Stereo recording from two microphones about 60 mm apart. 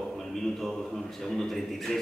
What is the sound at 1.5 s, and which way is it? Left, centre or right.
Speech, centre.